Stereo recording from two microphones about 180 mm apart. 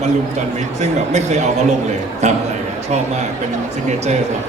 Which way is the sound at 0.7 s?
40° right (ahead or behind).